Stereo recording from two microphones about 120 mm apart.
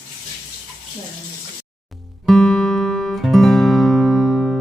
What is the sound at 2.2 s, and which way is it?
Music, centre (ahead or behind).